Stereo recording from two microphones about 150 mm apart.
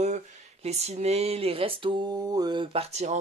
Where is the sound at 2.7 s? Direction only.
45° right (ahead or behind).